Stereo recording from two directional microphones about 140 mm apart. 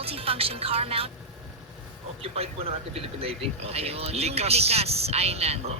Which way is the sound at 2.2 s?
45° right (ahead or behind).